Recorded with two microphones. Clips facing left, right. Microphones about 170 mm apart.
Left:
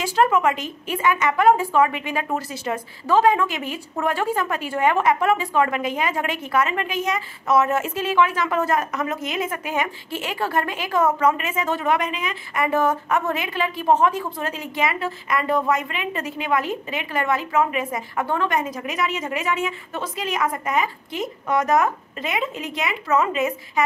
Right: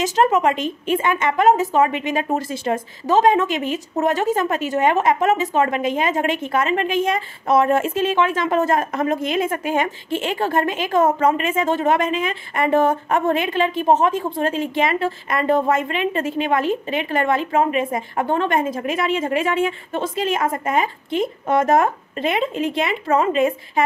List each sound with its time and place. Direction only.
0.0 s a woman's voice: 20° right (ahead or behind)